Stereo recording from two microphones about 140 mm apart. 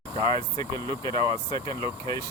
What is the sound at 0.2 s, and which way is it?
Speech, 30° left (ahead or behind).